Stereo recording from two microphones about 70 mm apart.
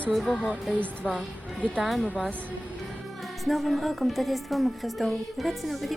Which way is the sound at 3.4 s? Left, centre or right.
Centre.